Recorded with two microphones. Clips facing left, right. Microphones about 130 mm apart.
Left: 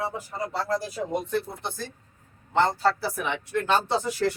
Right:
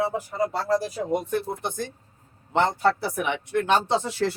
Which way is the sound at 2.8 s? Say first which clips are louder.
Right 2 dB; 60° right (ahead or behind).